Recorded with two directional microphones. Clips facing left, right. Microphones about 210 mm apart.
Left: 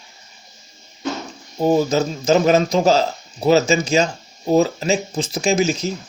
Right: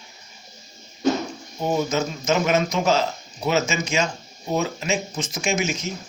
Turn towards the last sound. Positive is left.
turn(degrees=35)  # may be behind; listen again after turning